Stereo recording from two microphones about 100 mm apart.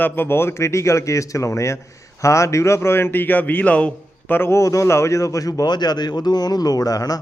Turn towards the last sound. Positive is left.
turn(degrees=40)  # may be behind; listen again after turning